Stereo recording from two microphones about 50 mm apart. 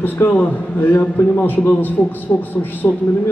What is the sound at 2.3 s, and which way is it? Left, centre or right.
Speech, left.